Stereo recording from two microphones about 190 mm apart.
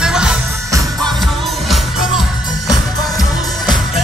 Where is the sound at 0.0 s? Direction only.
5° right (ahead or behind).